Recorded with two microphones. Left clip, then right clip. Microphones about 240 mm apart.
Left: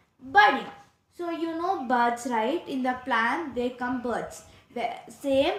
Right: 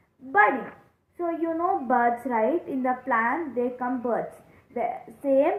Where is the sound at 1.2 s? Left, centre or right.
Left.